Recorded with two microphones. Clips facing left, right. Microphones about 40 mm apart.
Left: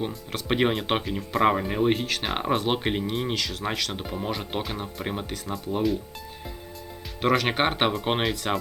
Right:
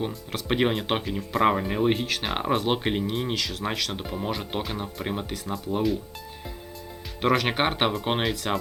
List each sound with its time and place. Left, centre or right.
0.0 s speech: centre
7.2 s speech: centre